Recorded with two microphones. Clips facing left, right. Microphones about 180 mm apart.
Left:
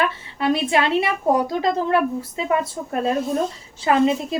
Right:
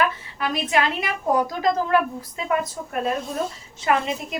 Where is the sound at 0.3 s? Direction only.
30° left (ahead or behind).